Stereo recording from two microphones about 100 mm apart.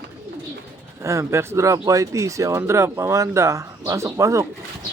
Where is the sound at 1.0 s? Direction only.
30° right (ahead or behind).